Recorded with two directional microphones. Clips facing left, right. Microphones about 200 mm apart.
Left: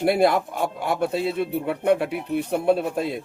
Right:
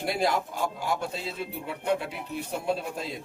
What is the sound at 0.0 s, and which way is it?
Speech, 60° left (ahead or behind).